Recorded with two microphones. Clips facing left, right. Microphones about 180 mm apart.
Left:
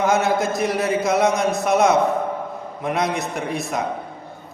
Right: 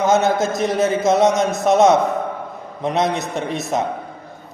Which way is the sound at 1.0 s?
20° right (ahead or behind).